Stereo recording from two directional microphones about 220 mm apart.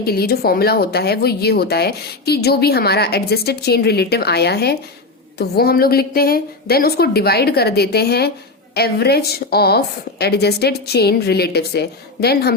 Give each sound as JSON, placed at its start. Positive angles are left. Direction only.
{"t": 0.0, "sound": "speech", "side_deg": 45}